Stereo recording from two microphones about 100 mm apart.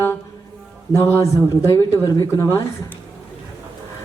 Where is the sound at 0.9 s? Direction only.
30° left (ahead or behind).